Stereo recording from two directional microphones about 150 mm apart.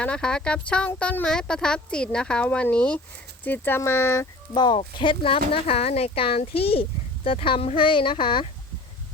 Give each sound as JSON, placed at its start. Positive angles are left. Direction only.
{"t": 0.0, "sound": "speech", "side_deg": 5}
{"t": 4.5, "sound": "speech", "side_deg": 30}